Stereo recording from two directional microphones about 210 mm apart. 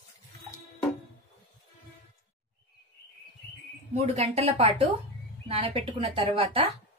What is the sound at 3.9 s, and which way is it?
A woman's voice, 30° right (ahead or behind).